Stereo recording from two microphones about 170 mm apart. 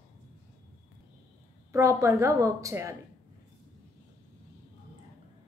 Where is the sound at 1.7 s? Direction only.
15° right (ahead or behind).